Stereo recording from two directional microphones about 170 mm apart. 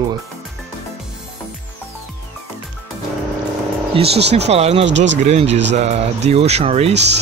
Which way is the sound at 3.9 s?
35° right (ahead or behind).